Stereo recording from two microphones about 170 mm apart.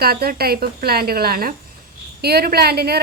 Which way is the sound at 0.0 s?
65° right (ahead or behind).